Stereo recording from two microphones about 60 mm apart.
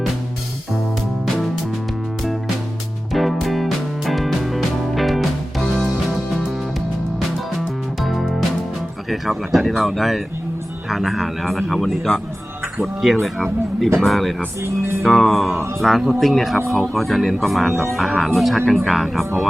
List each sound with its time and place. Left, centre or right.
3.1 s music: centre
8.0 s music: centre
9.0 s speech: centre
14.6 s music: right
15.0 s speech: centre